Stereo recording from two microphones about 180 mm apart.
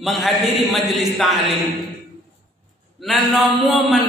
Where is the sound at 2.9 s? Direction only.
Centre (ahead or behind).